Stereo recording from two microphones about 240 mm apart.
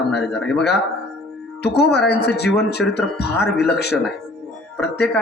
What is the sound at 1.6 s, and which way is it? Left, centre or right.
A man's voice, left.